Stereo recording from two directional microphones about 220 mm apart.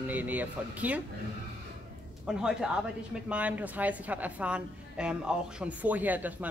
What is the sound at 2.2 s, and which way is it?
Speech, 5° right (ahead or behind).